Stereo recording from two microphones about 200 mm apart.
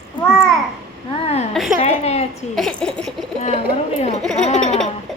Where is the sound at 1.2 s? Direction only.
30° left (ahead or behind).